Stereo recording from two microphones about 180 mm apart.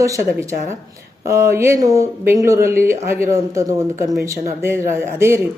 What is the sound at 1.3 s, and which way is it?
Speech, 15° right (ahead or behind).